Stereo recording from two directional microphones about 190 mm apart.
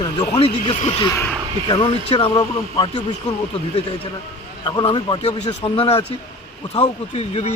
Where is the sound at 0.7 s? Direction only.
35° left (ahead or behind).